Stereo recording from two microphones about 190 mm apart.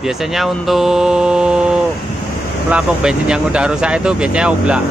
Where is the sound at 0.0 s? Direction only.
Centre (ahead or behind).